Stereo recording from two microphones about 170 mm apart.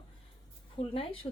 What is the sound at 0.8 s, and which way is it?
Speech, 35° left (ahead or behind).